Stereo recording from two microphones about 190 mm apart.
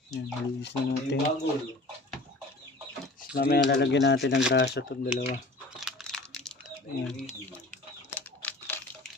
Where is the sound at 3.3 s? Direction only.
60° left (ahead or behind).